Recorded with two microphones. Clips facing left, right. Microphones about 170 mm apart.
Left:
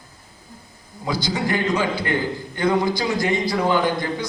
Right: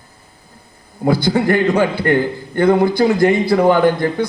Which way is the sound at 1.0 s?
55° right (ahead or behind).